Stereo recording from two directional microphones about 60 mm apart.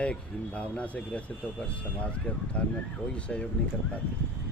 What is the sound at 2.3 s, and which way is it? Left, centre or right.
Speech, left.